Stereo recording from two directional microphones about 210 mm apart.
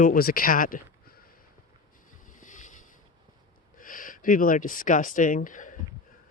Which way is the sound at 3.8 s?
40° left (ahead or behind).